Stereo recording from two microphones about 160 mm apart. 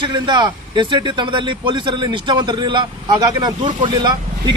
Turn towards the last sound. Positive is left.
turn(degrees=-25)  # may be behind; listen again after turning